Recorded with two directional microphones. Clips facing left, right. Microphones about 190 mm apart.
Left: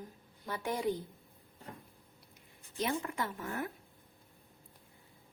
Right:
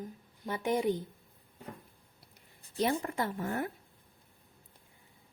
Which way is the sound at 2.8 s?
35° right (ahead or behind).